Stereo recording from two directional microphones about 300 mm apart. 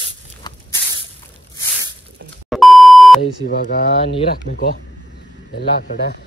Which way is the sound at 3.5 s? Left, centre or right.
Left.